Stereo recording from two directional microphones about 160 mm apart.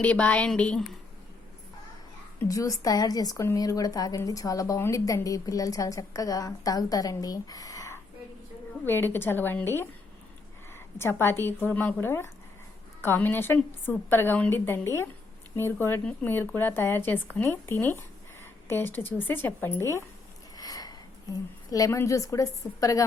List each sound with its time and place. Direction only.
0.0 s speech: 10° left (ahead or behind)
2.4 s a woman's voice: 20° left (ahead or behind)
20.6 s a sound: 25° left (ahead or behind)
21.7 s a woman's voice: 20° left (ahead or behind)